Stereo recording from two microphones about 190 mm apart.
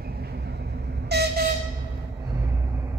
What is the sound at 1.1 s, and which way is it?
Vehicle, 60° right (ahead or behind).